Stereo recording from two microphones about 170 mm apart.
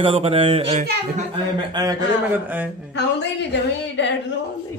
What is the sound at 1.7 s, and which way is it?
Speech, 20° right (ahead or behind).